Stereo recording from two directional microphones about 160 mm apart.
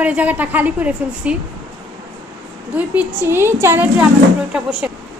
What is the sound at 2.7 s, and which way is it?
A woman's voice, 10° right (ahead or behind).